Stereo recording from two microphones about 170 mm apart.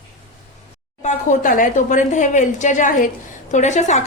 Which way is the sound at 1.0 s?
50° left (ahead or behind).